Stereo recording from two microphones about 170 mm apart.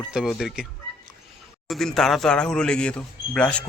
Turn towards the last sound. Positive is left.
turn(degrees=5)  # may be behind; listen again after turning